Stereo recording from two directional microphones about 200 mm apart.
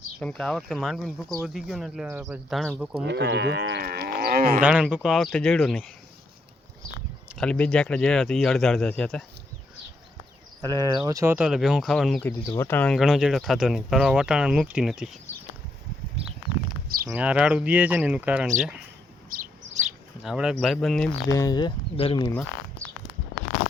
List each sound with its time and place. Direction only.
0.2 s speech: 5° left (ahead or behind)
3.1 s speech: 60° right (ahead or behind)
4.6 s speech: 5° right (ahead or behind)
7.3 s speech: 5° left (ahead or behind)
10.6 s speech: 20° right (ahead or behind); by 15.2 s centre (ahead or behind)
17.2 s speech: 5° right (ahead or behind)
19.3 s bird: 45° right (ahead or behind)
20.2 s speech: 5° right (ahead or behind)
21.2 s speech: 15° left (ahead or behind)